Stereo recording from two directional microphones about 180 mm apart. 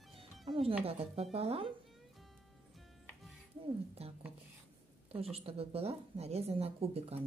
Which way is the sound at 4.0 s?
35° right (ahead or behind).